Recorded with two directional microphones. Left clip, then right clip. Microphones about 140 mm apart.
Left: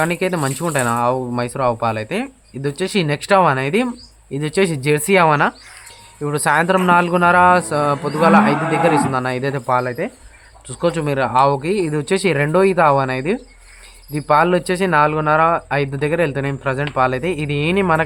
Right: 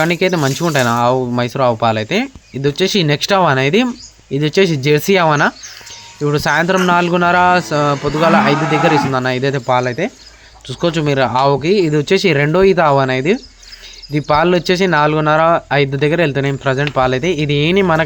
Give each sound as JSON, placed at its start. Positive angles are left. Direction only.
{"t": 0.0, "sound": "speech", "side_deg": -25}